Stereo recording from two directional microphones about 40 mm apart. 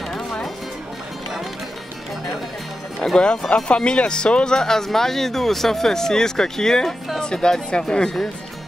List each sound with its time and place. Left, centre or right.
0.1 s music: centre
3.2 s speech: left
4.6 s speech: centre